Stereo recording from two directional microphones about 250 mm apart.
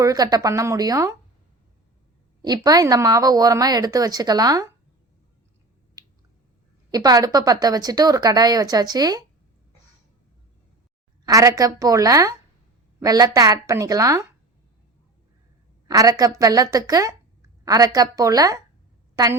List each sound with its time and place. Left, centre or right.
0.0 s a woman's voice: centre
2.4 s a woman's voice: centre
6.0 s squish: centre
6.9 s a woman's voice: centre
11.3 s a woman's voice: centre
15.9 s a woman's voice: centre